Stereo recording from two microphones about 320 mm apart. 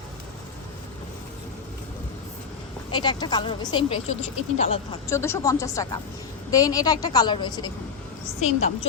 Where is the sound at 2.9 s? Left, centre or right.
Centre.